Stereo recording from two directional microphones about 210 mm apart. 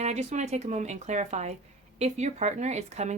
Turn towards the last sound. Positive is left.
turn(degrees=-30)  # may be behind; listen again after turning